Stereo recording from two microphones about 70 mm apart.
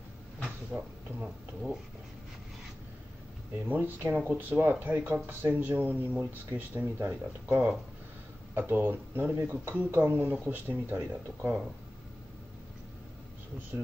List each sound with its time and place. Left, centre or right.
0.7 s speech: centre
3.6 s speech: right